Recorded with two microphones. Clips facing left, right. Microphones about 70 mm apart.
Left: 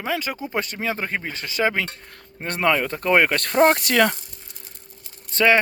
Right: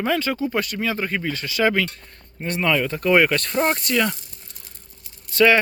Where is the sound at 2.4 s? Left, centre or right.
Left.